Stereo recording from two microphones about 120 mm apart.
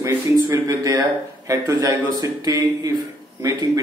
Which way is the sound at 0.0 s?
25° right (ahead or behind).